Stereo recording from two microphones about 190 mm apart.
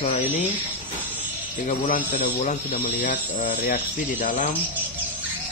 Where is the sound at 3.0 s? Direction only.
35° left (ahead or behind).